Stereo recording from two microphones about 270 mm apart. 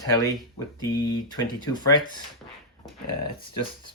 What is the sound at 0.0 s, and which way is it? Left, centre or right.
Speech, centre.